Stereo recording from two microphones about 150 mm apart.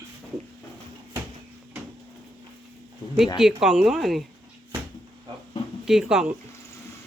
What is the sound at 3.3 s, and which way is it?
Speech, centre (ahead or behind).